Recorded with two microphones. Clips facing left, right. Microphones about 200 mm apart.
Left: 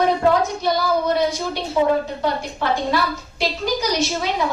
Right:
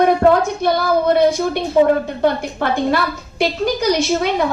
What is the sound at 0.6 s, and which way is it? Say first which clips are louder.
A woman's voice: right 4 dB; 55° right (ahead or behind).